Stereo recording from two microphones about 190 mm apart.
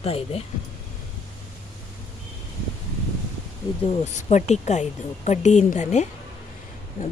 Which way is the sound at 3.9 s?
35° left (ahead or behind).